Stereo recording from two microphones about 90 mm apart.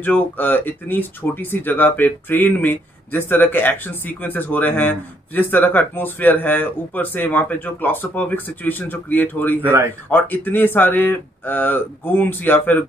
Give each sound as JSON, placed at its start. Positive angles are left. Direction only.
{"t": 0.0, "sound": "speech", "side_deg": 20}